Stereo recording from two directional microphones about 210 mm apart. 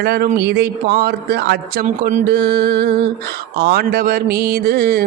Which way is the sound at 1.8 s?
35° right (ahead or behind).